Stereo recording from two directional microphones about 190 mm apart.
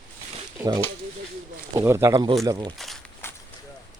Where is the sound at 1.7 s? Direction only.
15° right (ahead or behind).